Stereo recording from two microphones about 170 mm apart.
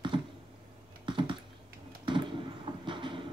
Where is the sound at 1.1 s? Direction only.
30° right (ahead or behind).